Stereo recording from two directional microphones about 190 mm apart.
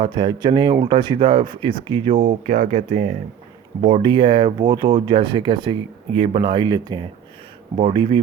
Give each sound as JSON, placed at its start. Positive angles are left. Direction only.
{"t": 0.0, "sound": "speech", "side_deg": -25}
{"t": 2.5, "sound": "speech", "side_deg": -40}
{"t": 3.8, "sound": "speech", "side_deg": -25}